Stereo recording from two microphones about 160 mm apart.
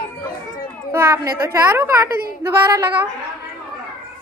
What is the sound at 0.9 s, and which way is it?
A woman's voice, 15° right (ahead or behind).